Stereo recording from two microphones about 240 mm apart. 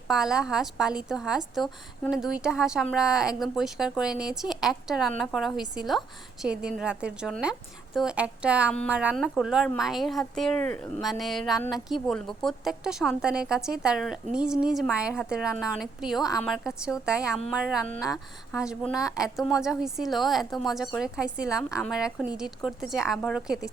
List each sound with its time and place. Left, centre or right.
0.1 s a woman's voice: centre